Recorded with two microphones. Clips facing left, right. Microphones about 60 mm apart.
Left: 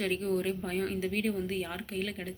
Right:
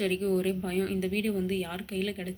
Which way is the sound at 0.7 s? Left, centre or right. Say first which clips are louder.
Right 3 dB; left.